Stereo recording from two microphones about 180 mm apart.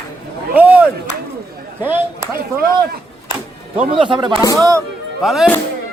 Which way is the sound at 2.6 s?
60° right (ahead or behind).